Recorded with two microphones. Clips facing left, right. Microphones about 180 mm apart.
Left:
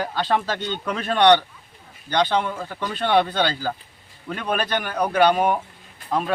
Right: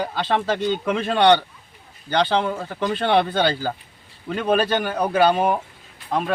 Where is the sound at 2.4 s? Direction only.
15° right (ahead or behind).